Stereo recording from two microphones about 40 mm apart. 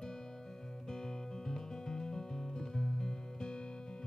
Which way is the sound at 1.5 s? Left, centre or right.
Centre.